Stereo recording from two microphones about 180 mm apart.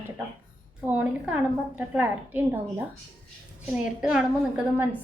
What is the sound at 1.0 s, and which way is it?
A woman's voice, 5° right (ahead or behind).